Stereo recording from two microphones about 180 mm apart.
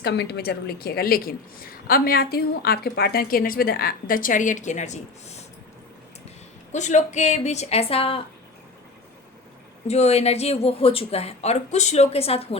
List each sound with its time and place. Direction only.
0.0 s a woman's voice: 65° left (ahead or behind); by 5.4 s 40° left (ahead or behind)
6.7 s a woman's voice: 40° left (ahead or behind)
9.8 s a woman's voice: 35° left (ahead or behind)